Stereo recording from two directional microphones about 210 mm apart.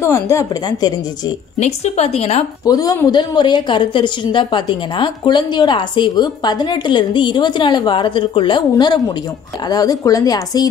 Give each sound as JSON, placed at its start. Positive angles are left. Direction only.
{"t": 0.0, "sound": "a woman's voice", "side_deg": 15}
{"t": 1.6, "sound": "a woman's voice", "side_deg": 30}
{"t": 2.6, "sound": "a woman's voice", "side_deg": 15}